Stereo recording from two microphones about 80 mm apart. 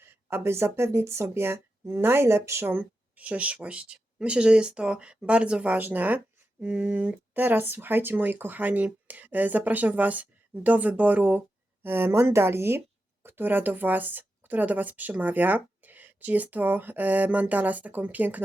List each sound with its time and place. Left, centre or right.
0.1 s speech: right